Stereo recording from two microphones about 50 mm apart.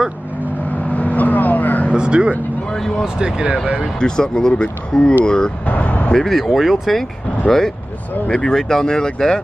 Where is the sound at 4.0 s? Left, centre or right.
Centre.